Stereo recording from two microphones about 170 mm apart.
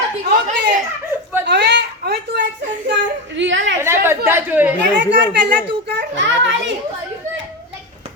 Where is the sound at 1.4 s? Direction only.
90° right; by 2.4 s 75° right (ahead or behind).